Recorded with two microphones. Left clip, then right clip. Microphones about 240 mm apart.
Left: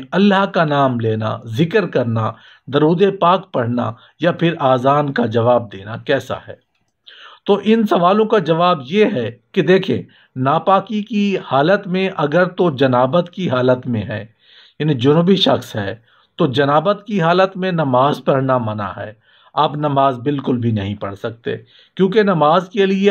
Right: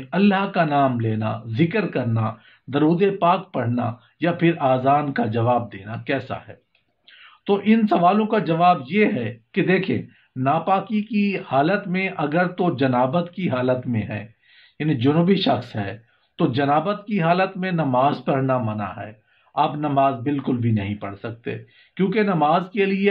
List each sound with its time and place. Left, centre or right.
0.1 s speech: left